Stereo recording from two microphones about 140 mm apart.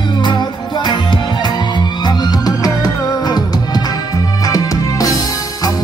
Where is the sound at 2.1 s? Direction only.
25° left (ahead or behind).